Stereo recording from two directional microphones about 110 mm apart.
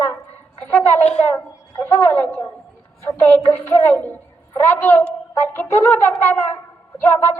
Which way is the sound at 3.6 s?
20° left (ahead or behind).